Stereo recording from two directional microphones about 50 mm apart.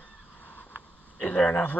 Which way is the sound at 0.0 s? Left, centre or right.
Left.